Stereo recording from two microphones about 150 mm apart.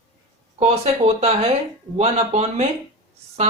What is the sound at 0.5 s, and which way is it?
Speech, 45° right (ahead or behind).